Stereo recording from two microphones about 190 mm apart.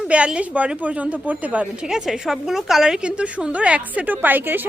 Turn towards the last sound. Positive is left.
turn(degrees=-10)  # may be behind; listen again after turning